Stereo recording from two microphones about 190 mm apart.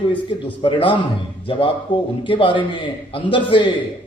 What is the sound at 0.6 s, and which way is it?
Speech, 25° left (ahead or behind).